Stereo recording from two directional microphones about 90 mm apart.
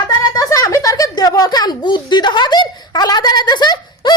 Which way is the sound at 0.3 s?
40° left (ahead or behind).